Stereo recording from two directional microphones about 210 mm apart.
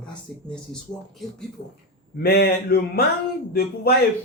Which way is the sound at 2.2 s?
45° left (ahead or behind).